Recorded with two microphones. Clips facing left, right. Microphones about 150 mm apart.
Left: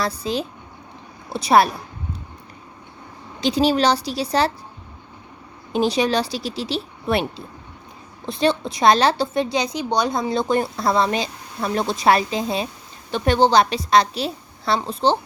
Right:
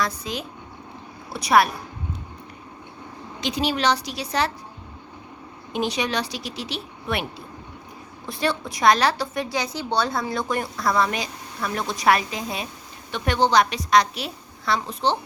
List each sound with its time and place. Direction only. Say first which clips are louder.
0.0 s a woman's voice: left 4 dB; 30° left (ahead or behind)
3.4 s a woman's voice: left 5 dB; 30° left (ahead or behind)
5.7 s a woman's voice: left 6 dB; 35° left (ahead or behind)